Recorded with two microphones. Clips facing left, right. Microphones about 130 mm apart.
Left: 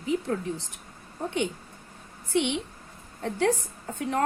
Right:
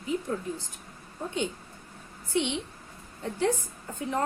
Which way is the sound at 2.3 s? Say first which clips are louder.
Left 2 dB; 65° left (ahead or behind).